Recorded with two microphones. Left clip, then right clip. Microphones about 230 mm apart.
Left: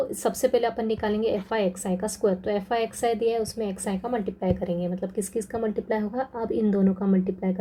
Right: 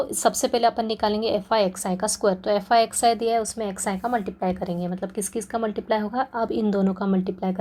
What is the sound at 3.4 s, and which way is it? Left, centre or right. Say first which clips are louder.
Speech: right 1 dB; centre.